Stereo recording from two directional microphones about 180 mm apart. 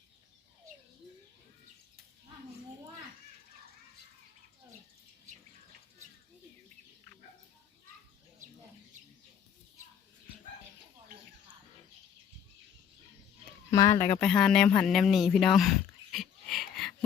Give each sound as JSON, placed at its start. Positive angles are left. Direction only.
{"t": 13.7, "sound": "speech", "side_deg": 20}
{"t": 14.2, "sound": "speech", "side_deg": 5}